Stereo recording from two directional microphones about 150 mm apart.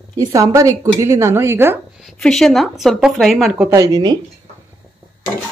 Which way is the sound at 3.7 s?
25° right (ahead or behind).